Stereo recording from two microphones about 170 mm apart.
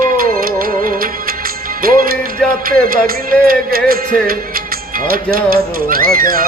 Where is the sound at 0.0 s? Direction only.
60° right (ahead or behind).